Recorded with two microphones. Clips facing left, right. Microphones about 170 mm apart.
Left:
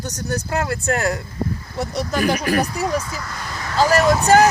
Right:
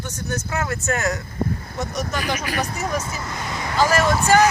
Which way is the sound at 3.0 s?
25° right (ahead or behind).